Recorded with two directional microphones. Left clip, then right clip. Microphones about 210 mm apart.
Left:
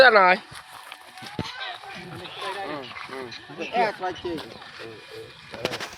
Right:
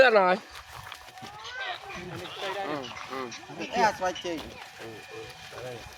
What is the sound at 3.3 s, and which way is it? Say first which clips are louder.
Speech: left 4 dB; 35° right (ahead or behind).